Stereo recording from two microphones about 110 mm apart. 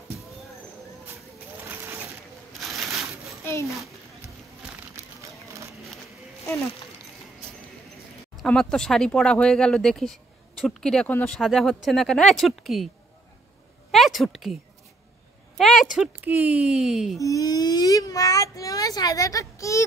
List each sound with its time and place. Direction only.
1.6 s a sound: 20° right (ahead or behind)
2.6 s a sound: centre (ahead or behind)
8.5 s speech: 5° left (ahead or behind)
11.1 s speech: 15° left (ahead or behind)
11.3 s speech: centre (ahead or behind)
13.9 s speech: centre (ahead or behind)
15.6 s speech: centre (ahead or behind)
16.3 s speech: 15° right (ahead or behind)
17.2 s speech: 30° left (ahead or behind)